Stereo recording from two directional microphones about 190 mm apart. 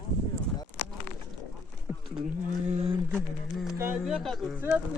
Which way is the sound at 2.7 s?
30° right (ahead or behind).